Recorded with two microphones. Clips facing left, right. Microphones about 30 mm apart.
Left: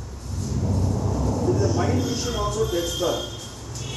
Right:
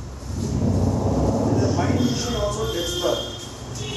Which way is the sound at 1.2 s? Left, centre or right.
Right.